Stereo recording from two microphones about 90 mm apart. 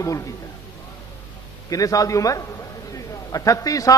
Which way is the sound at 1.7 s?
40° left (ahead or behind).